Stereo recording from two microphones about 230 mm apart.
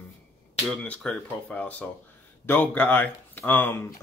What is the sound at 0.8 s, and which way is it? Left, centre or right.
Speech, centre.